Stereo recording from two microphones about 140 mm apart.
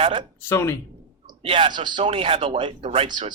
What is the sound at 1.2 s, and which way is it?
Speech, 40° right (ahead or behind).